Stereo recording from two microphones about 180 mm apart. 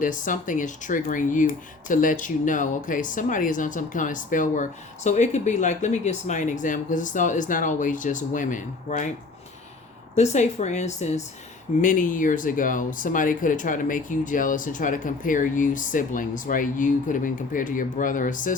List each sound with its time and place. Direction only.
0.0 s speech: 45° left (ahead or behind)
10.2 s a woman's voice: 40° left (ahead or behind)